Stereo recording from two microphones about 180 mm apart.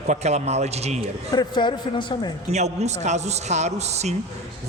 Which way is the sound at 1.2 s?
25° left (ahead or behind).